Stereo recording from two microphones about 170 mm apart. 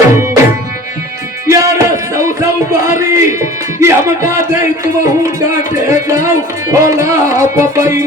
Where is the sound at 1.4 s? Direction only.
20° right (ahead or behind).